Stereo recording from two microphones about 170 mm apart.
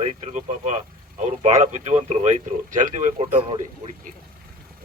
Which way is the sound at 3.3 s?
30° right (ahead or behind).